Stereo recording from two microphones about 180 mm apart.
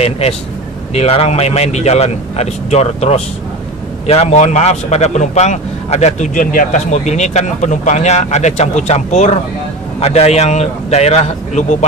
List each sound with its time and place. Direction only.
0.0 s a man's voice: 35° left (ahead or behind)